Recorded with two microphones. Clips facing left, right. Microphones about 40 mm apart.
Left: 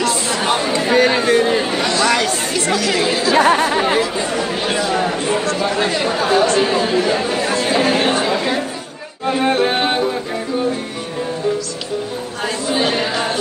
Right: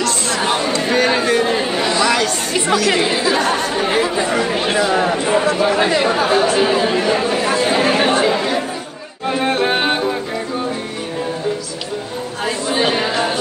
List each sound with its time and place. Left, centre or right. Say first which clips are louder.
0.0 s chatter: even; centre
0.8 s a sound: left 2 dB; centre
2.9 s speech: right 1 dB; centre
3.3 s speech: left 4 dB; centre
4.0 s speech: right 2 dB; centre
9.2 s music: left 1 dB; centre
12.6 s chatter: right 1 dB; centre